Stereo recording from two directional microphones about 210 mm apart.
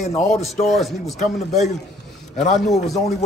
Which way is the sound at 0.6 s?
Centre (ahead or behind).